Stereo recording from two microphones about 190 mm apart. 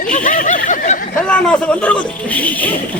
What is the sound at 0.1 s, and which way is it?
Snicker, 45° left (ahead or behind).